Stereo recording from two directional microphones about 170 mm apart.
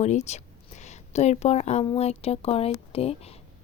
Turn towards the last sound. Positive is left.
turn(degrees=35)  # may be behind; listen again after turning